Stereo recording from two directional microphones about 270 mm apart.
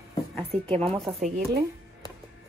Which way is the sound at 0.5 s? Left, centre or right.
Centre.